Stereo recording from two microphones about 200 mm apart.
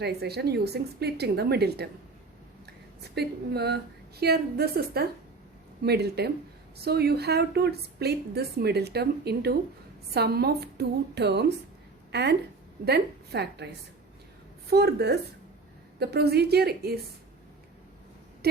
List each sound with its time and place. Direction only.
0.0 s a woman's voice: 55° right (ahead or behind)
14.7 s a woman's voice: 55° right (ahead or behind)